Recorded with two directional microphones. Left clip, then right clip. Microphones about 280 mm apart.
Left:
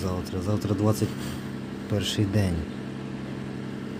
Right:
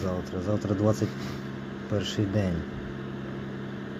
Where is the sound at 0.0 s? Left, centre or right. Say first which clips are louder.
Even; centre.